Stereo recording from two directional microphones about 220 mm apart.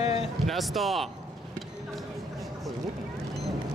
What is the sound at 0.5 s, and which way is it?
Speech, centre (ahead or behind).